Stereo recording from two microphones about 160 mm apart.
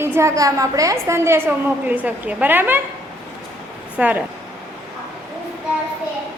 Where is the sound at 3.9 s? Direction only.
10° right (ahead or behind).